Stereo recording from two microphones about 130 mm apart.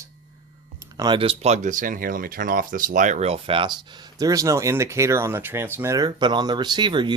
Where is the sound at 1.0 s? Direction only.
40° right (ahead or behind).